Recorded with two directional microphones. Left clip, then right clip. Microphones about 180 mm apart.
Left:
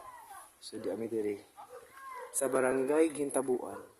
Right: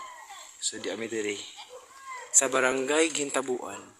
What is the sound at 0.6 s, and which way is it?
Speech, 5° left (ahead or behind).